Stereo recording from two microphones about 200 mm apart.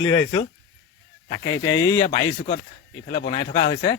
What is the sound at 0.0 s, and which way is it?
Speech, 15° left (ahead or behind).